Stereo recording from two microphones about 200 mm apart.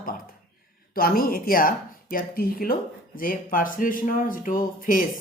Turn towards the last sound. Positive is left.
turn(degrees=40)  # may be behind; listen again after turning